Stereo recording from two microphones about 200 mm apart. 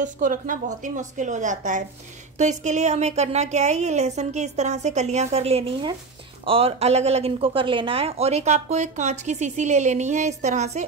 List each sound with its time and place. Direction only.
0.0 s speech: 40° right (ahead or behind)